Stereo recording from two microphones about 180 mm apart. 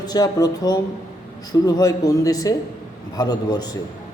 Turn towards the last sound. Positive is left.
turn(degrees=20)  # may be behind; listen again after turning